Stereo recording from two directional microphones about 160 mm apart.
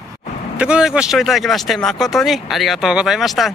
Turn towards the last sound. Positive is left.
turn(degrees=0)  # may be behind; listen again after turning